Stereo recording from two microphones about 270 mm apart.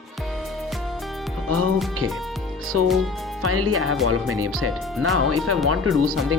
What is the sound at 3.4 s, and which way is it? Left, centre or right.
Speech, right.